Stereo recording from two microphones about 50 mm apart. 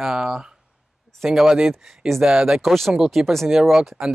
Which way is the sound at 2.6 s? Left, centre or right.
Centre.